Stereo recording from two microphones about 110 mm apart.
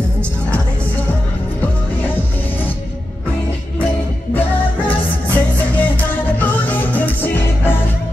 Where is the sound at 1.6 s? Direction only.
15° left (ahead or behind).